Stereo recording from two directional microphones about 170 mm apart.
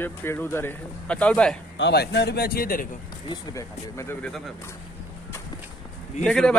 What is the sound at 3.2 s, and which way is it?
Speech, 20° left (ahead or behind).